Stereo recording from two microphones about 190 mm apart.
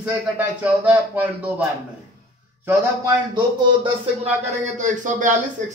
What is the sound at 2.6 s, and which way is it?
Speech, 10° right (ahead or behind).